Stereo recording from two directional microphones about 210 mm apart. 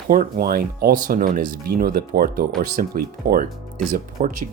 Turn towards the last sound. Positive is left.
turn(degrees=-40)  # may be behind; listen again after turning